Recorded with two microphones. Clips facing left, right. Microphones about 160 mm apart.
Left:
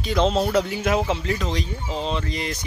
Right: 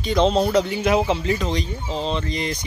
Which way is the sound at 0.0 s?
5° left (ahead or behind).